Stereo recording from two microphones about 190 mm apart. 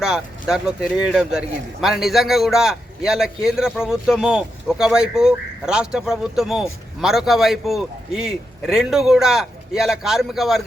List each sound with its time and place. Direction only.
0.0 s a man's voice: 5° right (ahead or behind)